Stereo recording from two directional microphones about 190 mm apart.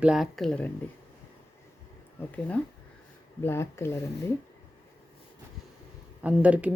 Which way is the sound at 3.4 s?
15° left (ahead or behind).